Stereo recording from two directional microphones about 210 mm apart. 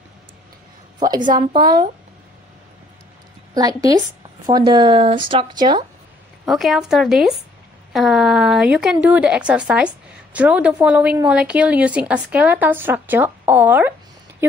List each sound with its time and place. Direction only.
0.9 s a woman's voice: 20° right (ahead or behind)
3.5 s speech: 20° right (ahead or behind)
6.4 s a woman's voice: centre (ahead or behind)